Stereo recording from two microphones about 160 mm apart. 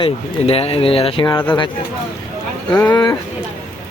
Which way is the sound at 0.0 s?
40° left (ahead or behind).